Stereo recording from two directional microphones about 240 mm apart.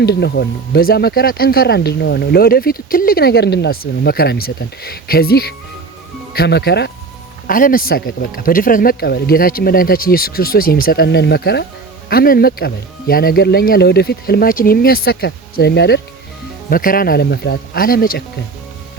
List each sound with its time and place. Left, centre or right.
0.0 s speech: left